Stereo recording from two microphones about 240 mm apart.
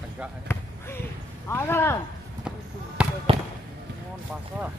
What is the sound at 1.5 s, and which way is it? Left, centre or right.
Speech, centre.